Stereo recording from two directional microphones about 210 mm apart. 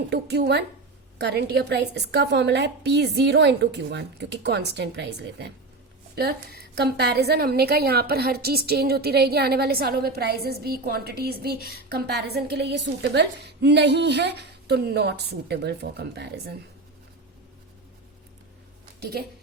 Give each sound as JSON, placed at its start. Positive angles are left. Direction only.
{"t": 0.1, "sound": "a woman's voice", "side_deg": -50}